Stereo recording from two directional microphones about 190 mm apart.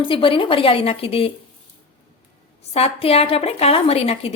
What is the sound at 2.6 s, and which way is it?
A woman's voice, 30° left (ahead or behind).